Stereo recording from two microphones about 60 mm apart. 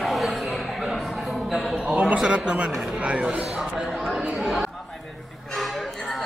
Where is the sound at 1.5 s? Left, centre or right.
Centre.